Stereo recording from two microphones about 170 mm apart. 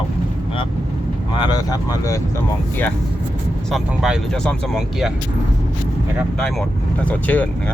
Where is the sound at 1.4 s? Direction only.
25° left (ahead or behind).